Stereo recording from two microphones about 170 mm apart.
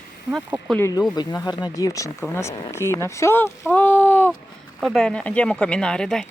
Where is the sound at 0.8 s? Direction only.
20° left (ahead or behind).